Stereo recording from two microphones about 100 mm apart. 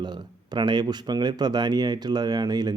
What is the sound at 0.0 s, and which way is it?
Speech, 45° right (ahead or behind).